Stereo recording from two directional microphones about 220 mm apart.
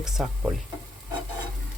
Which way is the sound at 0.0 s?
Centre (ahead or behind).